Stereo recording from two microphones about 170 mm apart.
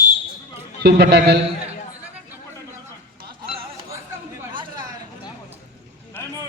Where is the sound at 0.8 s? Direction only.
80° right.